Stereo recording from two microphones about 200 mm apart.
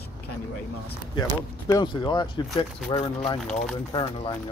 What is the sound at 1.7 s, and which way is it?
Speech, 20° left (ahead or behind).